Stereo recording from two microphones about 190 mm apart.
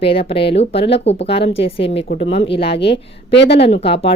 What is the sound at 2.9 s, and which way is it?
Speech, 60° left (ahead or behind).